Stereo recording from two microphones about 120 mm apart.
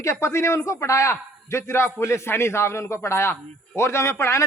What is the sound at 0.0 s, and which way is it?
A man's voice, 25° left (ahead or behind).